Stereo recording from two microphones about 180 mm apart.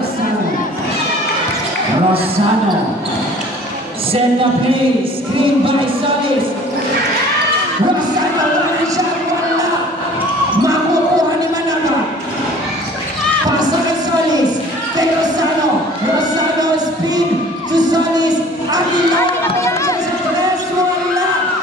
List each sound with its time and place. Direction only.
17.7 s music: 20° right (ahead or behind)
19.6 s run: 15° left (ahead or behind)